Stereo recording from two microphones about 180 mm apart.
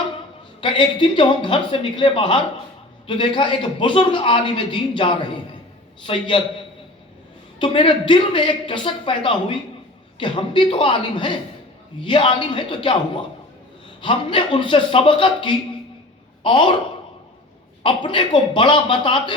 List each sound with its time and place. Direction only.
0.6 s a man's voice: 25° left (ahead or behind)
7.6 s a man's voice: 25° left (ahead or behind)
17.8 s a man's voice: 25° left (ahead or behind)